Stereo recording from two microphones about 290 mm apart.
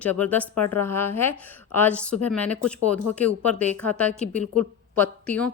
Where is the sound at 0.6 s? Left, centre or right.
Left.